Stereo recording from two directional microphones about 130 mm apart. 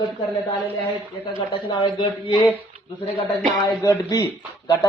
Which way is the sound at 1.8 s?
40° left (ahead or behind).